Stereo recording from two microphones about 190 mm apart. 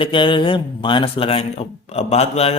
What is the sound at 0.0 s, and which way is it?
A man's voice, 25° left (ahead or behind).